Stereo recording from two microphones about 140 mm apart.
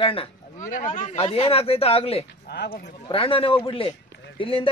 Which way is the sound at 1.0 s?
45° left (ahead or behind).